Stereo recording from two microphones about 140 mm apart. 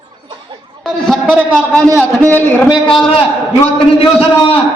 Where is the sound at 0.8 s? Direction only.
5° left (ahead or behind).